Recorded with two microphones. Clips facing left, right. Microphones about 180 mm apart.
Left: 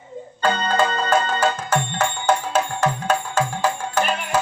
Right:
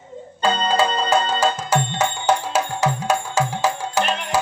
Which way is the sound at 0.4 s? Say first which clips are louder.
Right 1 dB; 25° right (ahead or behind).